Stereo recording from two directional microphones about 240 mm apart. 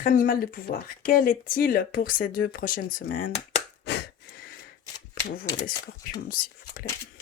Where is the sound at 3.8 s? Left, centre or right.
Left.